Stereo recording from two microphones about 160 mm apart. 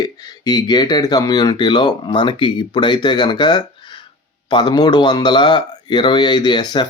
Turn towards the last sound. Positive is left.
turn(degrees=25)  # may be behind; listen again after turning